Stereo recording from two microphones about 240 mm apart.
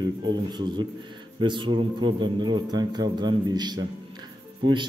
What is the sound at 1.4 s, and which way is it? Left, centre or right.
A man's voice, centre.